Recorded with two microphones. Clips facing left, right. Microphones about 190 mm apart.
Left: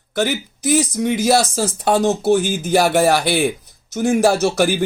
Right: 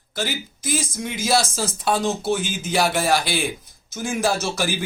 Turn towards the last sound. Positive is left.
turn(degrees=55)  # may be behind; listen again after turning